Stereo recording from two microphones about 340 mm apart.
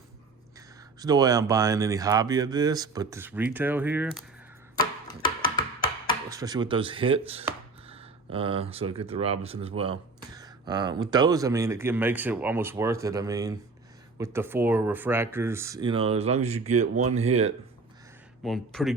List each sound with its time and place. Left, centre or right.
0.9 s speech: centre
5.0 s music: centre
6.3 s speech: centre
18.4 s speech: centre